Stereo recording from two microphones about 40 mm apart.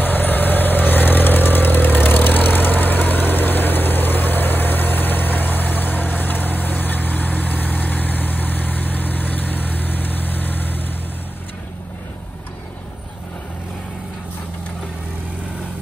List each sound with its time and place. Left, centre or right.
0.0 s vehicle: left